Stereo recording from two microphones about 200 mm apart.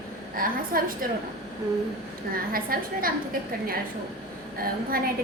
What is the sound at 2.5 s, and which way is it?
Speech, 45° right (ahead or behind).